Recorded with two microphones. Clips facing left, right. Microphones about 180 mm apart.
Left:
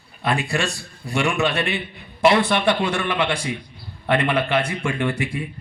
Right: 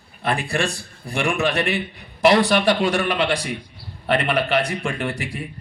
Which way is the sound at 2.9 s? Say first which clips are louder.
Right 2 dB; 35° right (ahead or behind).